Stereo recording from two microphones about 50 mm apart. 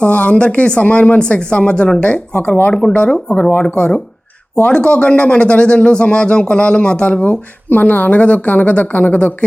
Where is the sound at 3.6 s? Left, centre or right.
Left.